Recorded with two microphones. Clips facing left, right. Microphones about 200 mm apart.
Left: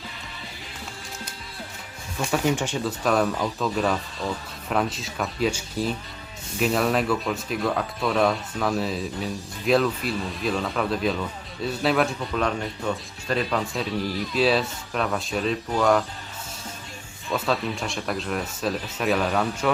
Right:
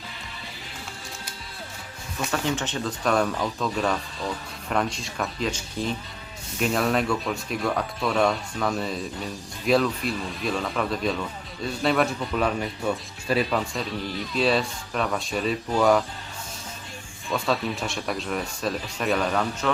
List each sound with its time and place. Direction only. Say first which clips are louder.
2.2 s speech: left 3 dB; 10° left (ahead or behind)
17.3 s speech: even; centre (ahead or behind)